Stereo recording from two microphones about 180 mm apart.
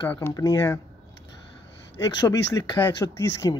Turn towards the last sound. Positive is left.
turn(degrees=15)  # may be behind; listen again after turning